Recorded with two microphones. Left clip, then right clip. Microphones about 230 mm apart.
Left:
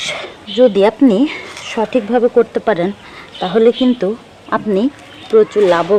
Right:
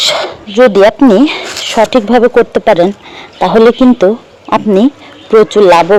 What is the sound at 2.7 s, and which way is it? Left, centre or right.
Speech, right.